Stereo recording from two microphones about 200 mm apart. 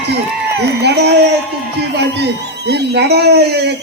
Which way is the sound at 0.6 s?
55° right (ahead or behind).